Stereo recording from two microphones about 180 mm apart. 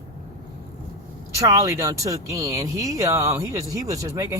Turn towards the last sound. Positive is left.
turn(degrees=-15)  # may be behind; listen again after turning